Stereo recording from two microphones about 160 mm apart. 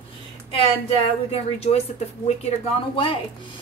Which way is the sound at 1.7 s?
45° left (ahead or behind).